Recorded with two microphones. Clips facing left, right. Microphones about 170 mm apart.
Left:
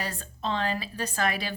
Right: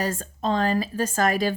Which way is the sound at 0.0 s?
45° right (ahead or behind).